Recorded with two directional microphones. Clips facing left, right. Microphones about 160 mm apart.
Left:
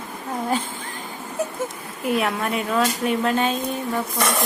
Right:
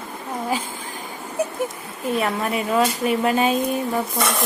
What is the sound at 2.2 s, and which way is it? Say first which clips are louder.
Speech: right 1 dB; centre (ahead or behind).